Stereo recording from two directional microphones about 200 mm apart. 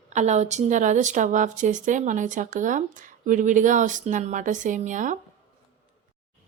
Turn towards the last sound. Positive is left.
turn(degrees=-40)  # may be behind; listen again after turning